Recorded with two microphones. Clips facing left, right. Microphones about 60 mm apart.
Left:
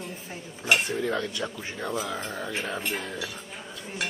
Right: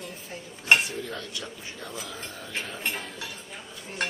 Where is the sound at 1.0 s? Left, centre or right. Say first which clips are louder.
Left 8 dB; left.